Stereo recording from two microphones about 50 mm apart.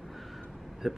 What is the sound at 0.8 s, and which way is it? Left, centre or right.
Speech, centre.